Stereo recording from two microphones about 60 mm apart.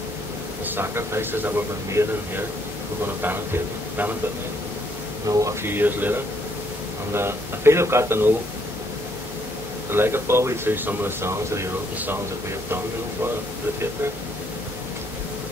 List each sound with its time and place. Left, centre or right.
0.7 s a man's voice: right
3.2 s speech: right
5.3 s speech: right
5.6 s speech: right
7.2 s a man's voice: right
9.8 s speech: right